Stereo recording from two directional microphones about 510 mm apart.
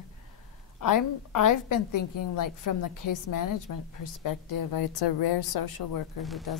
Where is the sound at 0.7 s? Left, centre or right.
Left.